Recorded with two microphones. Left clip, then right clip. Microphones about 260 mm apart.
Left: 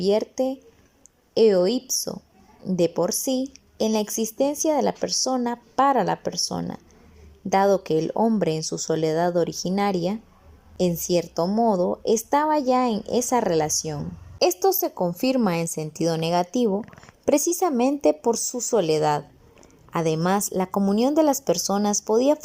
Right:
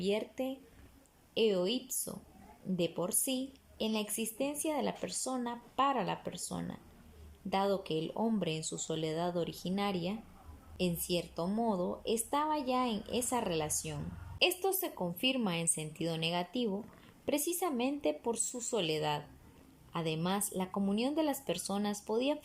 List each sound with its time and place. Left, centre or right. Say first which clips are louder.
0.0 s speech: left 13 dB; left